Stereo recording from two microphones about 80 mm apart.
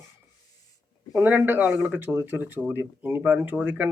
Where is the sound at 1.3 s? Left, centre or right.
Right.